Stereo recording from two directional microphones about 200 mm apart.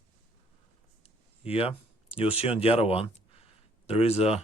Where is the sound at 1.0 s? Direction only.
30° left (ahead or behind).